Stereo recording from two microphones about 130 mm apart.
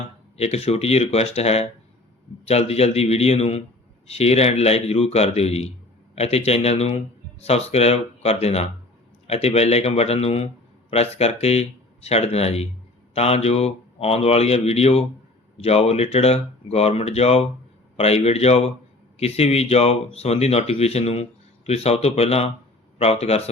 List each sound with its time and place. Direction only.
0.3 s speech: 50° left (ahead or behind)